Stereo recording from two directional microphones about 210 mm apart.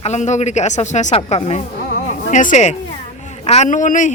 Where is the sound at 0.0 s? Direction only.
35° left (ahead or behind).